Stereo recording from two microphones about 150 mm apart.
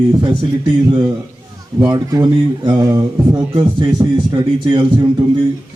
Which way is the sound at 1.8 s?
25° right (ahead or behind).